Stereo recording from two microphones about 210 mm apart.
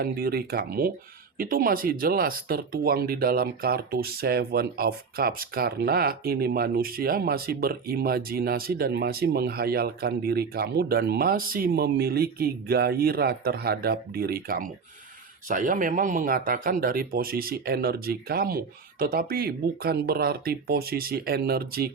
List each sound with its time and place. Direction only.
0.0 s speech: 45° right (ahead or behind)